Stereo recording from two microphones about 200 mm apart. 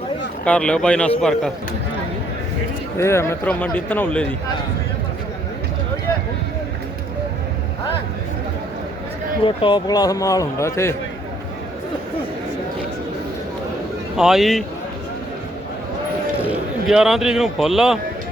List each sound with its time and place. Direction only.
0.4 s speech: 5° left (ahead or behind)
3.0 s a man's voice: 15° left (ahead or behind)
9.4 s a man's voice: 25° left (ahead or behind)
14.2 s speech: centre (ahead or behind)
16.4 s speech: 5° right (ahead or behind)